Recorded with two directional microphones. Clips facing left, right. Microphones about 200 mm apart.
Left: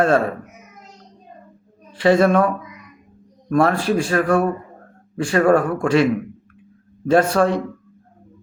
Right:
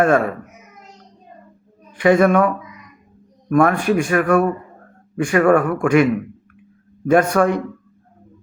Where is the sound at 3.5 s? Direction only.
30° left (ahead or behind).